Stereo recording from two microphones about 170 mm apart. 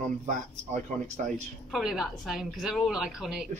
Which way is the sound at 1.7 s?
Centre (ahead or behind).